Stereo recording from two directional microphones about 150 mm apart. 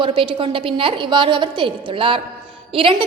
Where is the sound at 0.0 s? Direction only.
35° right (ahead or behind).